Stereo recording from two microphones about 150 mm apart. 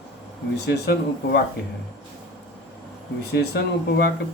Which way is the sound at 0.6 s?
90° left.